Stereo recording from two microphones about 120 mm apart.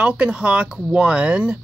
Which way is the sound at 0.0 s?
10° right (ahead or behind).